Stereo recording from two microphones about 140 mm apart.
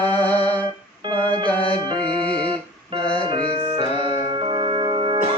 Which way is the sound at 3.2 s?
35° right (ahead or behind).